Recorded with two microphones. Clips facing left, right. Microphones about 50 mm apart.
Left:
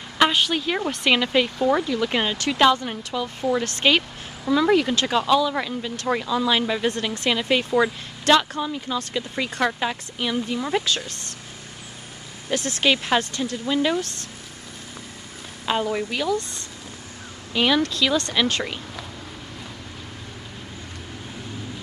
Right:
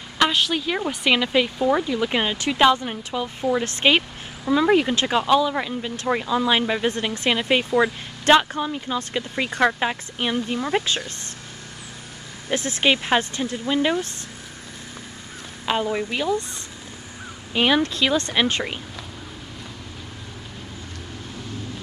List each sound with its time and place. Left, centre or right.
0.2 s speech: centre; by 10.6 s right
12.4 s speech: right
15.8 s speech: right
17.6 s speech: right